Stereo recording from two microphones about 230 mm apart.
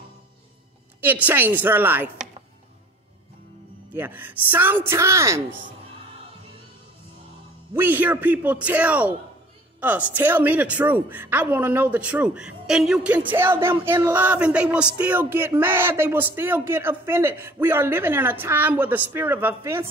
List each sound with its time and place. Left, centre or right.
1.0 s a woman's voice: centre
3.9 s a woman's voice: centre
7.7 s a woman's voice: centre